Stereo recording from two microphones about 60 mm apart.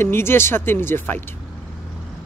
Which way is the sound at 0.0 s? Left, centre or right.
Left.